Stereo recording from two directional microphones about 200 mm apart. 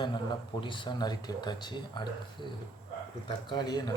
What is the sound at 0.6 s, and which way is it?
Speech, 25° left (ahead or behind).